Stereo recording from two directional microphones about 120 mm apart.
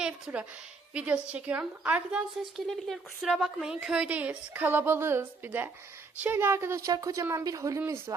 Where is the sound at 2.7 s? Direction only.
Centre (ahead or behind).